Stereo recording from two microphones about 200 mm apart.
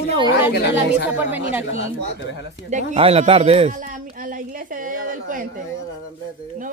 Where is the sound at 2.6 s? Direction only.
35° right (ahead or behind).